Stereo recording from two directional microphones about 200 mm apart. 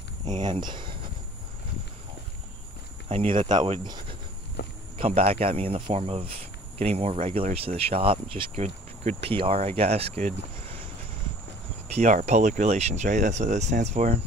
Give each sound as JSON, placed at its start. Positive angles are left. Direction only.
{"t": 0.4, "sound": "speech", "side_deg": -20}
{"t": 3.5, "sound": "speech", "side_deg": -25}
{"t": 4.6, "sound": "a sound", "side_deg": 55}
{"t": 4.9, "sound": "speech", "side_deg": -30}
{"t": 11.9, "sound": "speech", "side_deg": -35}